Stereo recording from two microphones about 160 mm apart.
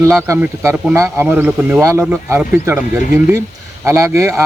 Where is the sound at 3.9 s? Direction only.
20° right (ahead or behind).